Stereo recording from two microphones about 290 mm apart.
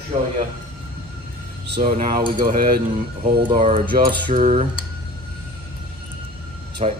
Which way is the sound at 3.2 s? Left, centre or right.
Centre.